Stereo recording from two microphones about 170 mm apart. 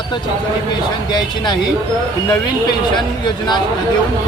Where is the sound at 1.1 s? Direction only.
25° left (ahead or behind).